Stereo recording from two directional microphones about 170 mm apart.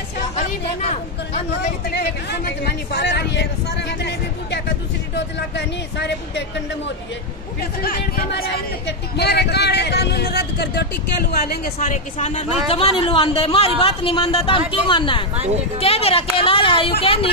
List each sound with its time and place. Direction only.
0.8 s speech: 40° left (ahead or behind)
1.9 s speech: 70° left (ahead or behind); by 6.4 s 90° left
7.8 s speech: 60° left (ahead or behind)
11.5 s speech: 55° left (ahead or behind); by 15.2 s 30° left (ahead or behind)
15.3 s speech: 40° right (ahead or behind)
15.8 s speech: 35° left (ahead or behind)